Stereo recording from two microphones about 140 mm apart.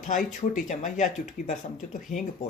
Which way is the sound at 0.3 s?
60° left (ahead or behind).